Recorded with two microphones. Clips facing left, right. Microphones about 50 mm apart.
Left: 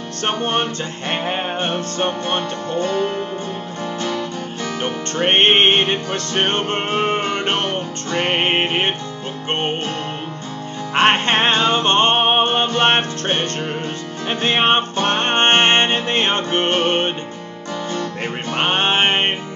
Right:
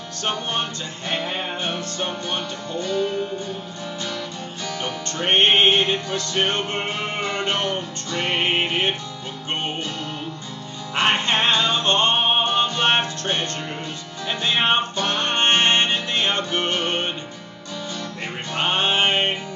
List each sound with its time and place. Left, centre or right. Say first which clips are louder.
0.2 s music: left 5 dB; left
4.8 s music: left 5 dB; left
11.0 s music: left 5 dB; left